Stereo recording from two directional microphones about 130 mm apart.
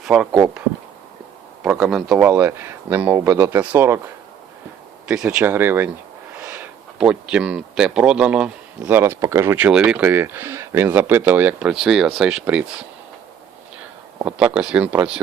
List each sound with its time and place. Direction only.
0.0 s speech: 5° right (ahead or behind)
1.6 s speech: 5° right (ahead or behind)
2.1 s speech: 15° right (ahead or behind)
5.0 s speech: 5° right (ahead or behind)
14.3 s speech: 10° right (ahead or behind)